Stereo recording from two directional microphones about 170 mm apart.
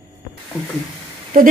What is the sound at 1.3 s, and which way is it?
Speech, 55° right (ahead or behind).